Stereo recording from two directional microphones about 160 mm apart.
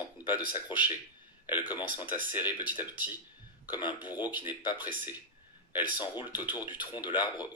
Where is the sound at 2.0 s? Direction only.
10° right (ahead or behind).